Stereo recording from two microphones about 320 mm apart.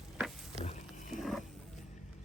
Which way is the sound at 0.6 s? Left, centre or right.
Left.